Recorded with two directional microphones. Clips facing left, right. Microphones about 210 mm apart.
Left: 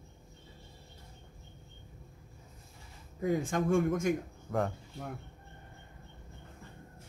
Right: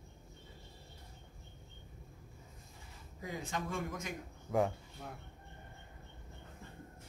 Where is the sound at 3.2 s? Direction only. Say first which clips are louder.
Left 11 dB; 50° left (ahead or behind).